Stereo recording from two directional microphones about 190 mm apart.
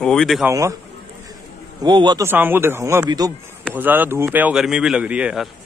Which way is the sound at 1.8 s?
25° right (ahead or behind).